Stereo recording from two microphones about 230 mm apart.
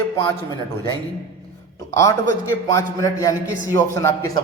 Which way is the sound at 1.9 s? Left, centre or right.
Centre.